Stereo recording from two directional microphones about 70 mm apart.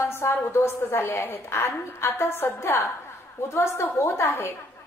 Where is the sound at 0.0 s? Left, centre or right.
Left.